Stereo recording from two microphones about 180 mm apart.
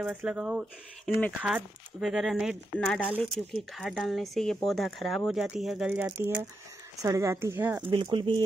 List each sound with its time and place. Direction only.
0.0 s speech: 5° right (ahead or behind)
7.9 s speech: 25° right (ahead or behind)